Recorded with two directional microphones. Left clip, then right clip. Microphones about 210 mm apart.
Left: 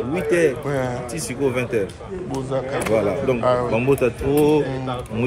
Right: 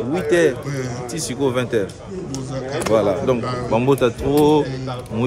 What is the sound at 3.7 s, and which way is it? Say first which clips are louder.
Speech: right 2 dB; 10° right (ahead or behind).